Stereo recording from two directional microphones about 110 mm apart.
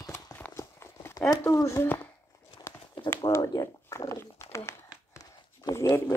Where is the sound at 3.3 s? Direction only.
35° left (ahead or behind).